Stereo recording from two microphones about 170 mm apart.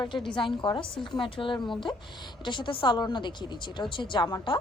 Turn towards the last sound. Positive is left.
turn(degrees=25)  # may be behind; listen again after turning